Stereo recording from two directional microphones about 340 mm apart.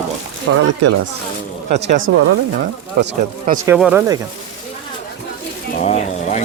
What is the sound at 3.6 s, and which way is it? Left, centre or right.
Speech, centre.